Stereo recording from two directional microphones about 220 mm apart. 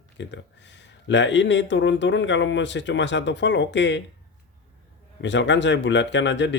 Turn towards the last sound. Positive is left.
turn(degrees=55)  # may be behind; listen again after turning